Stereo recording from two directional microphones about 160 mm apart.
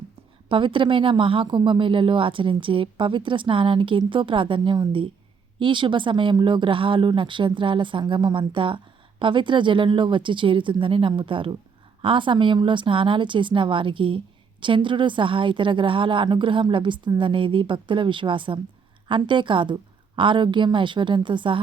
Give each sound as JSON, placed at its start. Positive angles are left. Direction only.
{"t": 0.4, "sound": "speech", "side_deg": -30}